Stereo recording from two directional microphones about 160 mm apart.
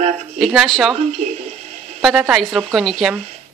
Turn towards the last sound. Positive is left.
turn(degrees=0)  # may be behind; listen again after turning